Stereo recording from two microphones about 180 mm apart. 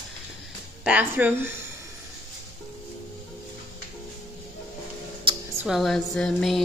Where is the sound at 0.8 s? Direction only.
10° right (ahead or behind).